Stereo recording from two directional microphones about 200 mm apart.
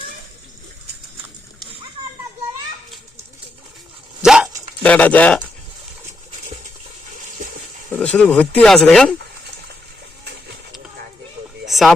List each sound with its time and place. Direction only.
4.2 s dog: 5° right (ahead or behind)
7.9 s speech: 5° left (ahead or behind)
11.7 s a sound: centre (ahead or behind)